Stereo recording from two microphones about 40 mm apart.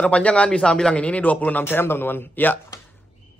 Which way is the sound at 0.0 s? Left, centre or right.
Left.